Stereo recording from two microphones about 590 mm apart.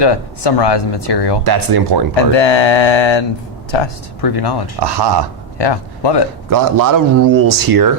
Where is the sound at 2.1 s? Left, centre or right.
Left.